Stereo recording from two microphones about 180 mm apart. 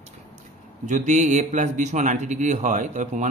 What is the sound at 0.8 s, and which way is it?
A man's voice, 40° right (ahead or behind).